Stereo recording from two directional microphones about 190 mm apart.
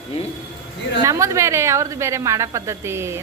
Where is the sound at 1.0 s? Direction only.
15° right (ahead or behind).